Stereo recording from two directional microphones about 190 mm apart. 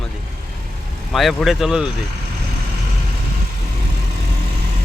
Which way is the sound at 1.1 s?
Centre (ahead or behind).